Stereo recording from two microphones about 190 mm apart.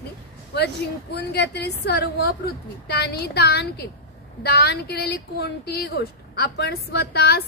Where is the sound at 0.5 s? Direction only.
60° left (ahead or behind).